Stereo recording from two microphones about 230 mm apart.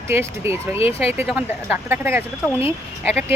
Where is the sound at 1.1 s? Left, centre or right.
Centre.